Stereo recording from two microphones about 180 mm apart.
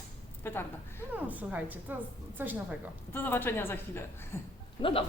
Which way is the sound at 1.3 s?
10° right (ahead or behind).